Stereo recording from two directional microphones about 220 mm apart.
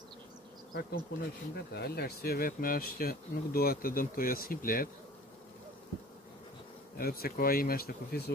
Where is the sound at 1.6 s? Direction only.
45° left (ahead or behind).